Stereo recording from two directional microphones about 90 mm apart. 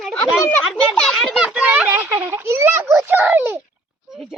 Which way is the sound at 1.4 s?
10° right (ahead or behind).